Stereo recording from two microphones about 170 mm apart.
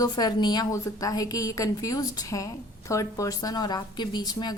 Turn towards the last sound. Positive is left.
turn(degrees=25)  # may be behind; listen again after turning